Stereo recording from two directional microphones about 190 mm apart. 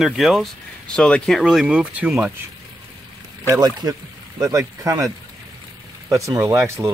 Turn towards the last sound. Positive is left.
turn(degrees=-15)  # may be behind; listen again after turning